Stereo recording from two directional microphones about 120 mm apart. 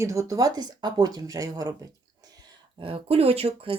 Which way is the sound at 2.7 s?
50° right (ahead or behind).